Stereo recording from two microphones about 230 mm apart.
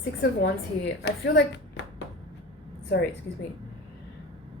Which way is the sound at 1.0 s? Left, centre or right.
Left.